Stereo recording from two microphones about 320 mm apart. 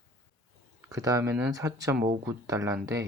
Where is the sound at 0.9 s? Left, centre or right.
Centre.